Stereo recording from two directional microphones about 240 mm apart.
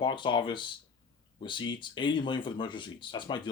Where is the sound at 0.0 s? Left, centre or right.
Centre.